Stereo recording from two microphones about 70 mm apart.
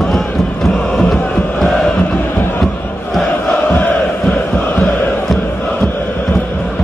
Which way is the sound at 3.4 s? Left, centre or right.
Left.